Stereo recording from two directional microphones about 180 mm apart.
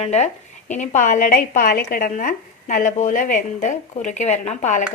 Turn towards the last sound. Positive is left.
turn(degrees=40)  # may be behind; listen again after turning